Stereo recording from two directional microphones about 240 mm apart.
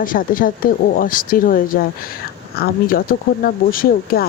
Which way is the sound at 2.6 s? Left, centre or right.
Left.